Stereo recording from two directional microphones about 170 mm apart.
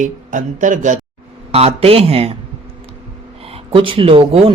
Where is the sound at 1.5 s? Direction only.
35° right (ahead or behind).